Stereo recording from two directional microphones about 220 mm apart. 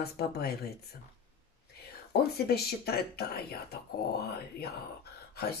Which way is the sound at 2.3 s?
45° left (ahead or behind).